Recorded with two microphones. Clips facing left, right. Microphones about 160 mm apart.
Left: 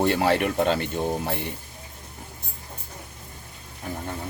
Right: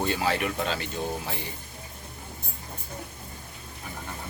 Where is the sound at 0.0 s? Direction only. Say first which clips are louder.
Left 5 dB; 65° left (ahead or behind).